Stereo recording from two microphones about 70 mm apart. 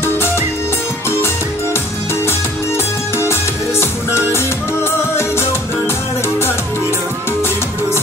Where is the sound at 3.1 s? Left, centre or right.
Left.